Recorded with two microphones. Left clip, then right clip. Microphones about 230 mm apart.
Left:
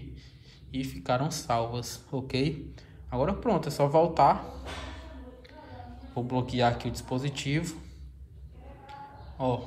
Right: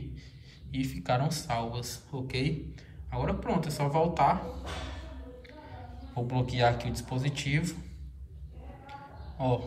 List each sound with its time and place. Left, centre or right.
0.7 s speech: centre
5.5 s speech: centre
9.4 s speech: centre